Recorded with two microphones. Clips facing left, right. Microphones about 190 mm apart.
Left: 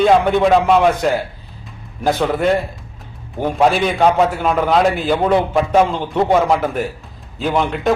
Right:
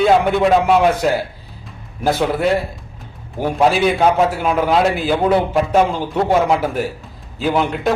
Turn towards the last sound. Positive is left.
turn(degrees=0)  # may be behind; listen again after turning